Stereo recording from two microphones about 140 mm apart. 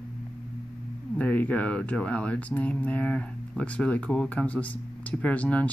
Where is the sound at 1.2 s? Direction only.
10° left (ahead or behind).